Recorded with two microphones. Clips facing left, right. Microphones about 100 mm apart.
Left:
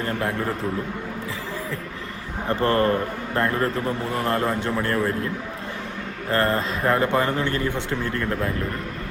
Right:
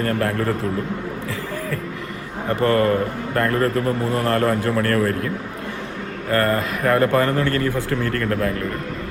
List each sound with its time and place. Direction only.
0.0 s a man's voice: 15° left (ahead or behind)
2.5 s a man's voice: 30° left (ahead or behind)
6.3 s a man's voice: 25° left (ahead or behind)